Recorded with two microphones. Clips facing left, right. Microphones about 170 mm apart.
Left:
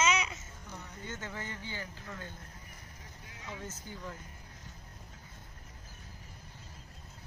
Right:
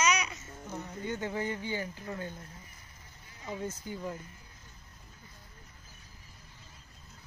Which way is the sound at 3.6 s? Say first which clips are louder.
Right 9 dB; 15° right (ahead or behind).